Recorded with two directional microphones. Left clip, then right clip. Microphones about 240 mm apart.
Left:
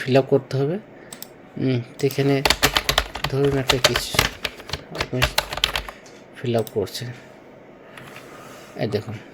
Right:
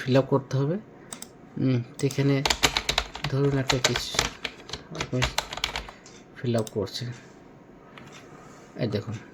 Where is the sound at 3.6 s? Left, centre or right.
Left.